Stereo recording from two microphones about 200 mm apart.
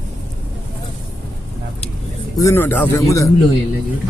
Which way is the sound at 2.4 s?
15° left (ahead or behind).